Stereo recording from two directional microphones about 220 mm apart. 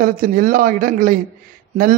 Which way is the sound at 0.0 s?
40° right (ahead or behind).